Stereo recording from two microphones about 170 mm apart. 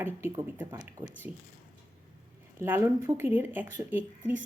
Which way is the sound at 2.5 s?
10° right (ahead or behind).